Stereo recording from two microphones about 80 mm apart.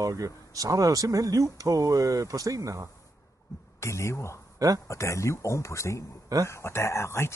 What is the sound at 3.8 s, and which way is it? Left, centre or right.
Speech, left.